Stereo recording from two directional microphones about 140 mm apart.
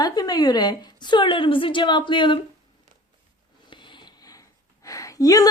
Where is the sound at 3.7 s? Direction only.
35° left (ahead or behind).